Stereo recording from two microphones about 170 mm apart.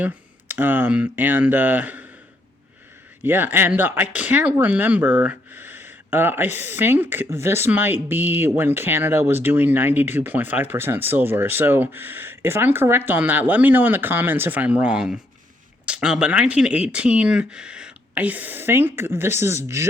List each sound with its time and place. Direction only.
0.0 s speech: 10° right (ahead or behind)
3.2 s speech: 10° right (ahead or behind)